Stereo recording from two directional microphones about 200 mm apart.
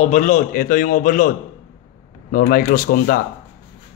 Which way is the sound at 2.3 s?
45° left (ahead or behind).